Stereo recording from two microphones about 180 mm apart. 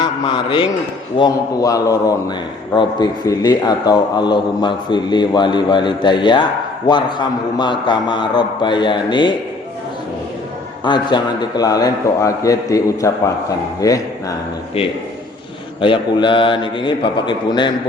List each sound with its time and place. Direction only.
0.0 s a sound: 25° left (ahead or behind)
1.2 s a man's voice: 20° left (ahead or behind)
10.8 s a man's voice: 25° left (ahead or behind)
15.8 s a man's voice: 25° left (ahead or behind)